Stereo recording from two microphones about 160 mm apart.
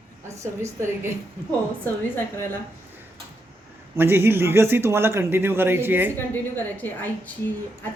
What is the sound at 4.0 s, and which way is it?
Speech, 15° right (ahead or behind).